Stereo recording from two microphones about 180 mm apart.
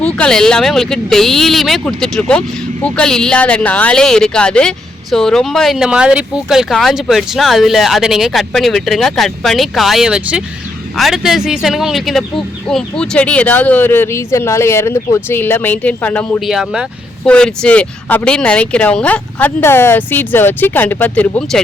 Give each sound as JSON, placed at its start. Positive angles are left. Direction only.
{"t": 0.2, "sound": "speech", "side_deg": 5}
{"t": 16.4, "sound": "speech", "side_deg": 0}